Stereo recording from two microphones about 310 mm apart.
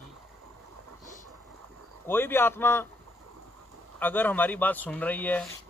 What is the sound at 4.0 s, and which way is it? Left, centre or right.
Speech, centre.